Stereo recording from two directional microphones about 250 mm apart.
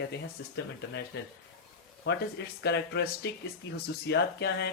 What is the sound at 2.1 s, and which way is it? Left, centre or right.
Speech, left.